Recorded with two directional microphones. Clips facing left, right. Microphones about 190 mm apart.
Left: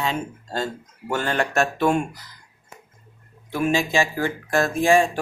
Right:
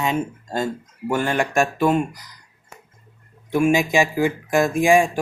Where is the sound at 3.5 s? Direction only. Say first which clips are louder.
Right 4 dB; 15° right (ahead or behind).